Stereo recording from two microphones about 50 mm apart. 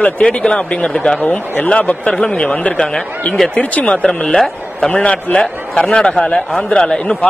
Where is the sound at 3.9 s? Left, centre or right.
Centre.